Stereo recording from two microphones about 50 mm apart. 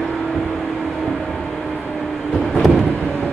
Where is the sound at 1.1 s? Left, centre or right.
Centre.